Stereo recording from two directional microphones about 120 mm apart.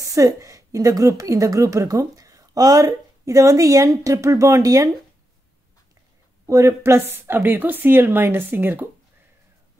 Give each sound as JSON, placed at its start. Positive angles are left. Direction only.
{"t": 0.0, "sound": "a woman's voice", "side_deg": -30}
{"t": 6.4, "sound": "a woman's voice", "side_deg": -25}